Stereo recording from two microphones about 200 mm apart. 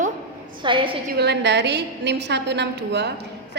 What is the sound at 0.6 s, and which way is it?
Speech, 25° right (ahead or behind).